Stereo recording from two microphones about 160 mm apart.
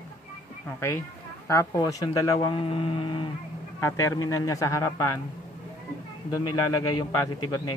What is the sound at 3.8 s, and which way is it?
A man's voice, 20° left (ahead or behind).